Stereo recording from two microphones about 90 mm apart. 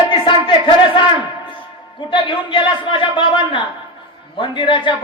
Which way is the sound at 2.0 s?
65° left (ahead or behind).